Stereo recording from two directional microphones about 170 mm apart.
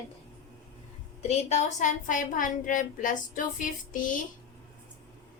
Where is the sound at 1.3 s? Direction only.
40° left (ahead or behind).